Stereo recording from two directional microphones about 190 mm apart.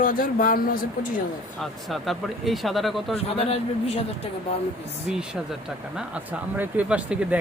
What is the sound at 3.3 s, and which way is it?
Speech, 30° left (ahead or behind).